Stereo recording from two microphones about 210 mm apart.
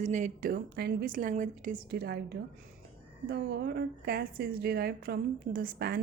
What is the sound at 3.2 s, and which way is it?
A woman's voice, 50° right (ahead or behind).